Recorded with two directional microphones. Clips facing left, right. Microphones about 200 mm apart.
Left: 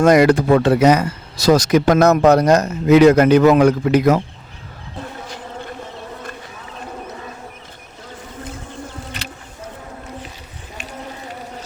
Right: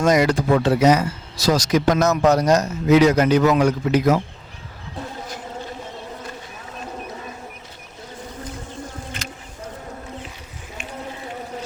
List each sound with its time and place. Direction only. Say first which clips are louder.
0.0 s speech: left 5 dB; 60° left (ahead or behind)